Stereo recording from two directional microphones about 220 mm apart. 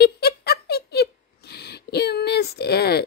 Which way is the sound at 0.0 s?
45° left (ahead or behind).